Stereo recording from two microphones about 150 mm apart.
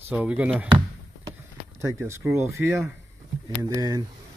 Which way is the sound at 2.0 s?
20° right (ahead or behind).